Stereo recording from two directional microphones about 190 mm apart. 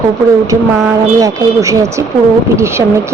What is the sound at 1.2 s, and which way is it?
Speech, 15° right (ahead or behind).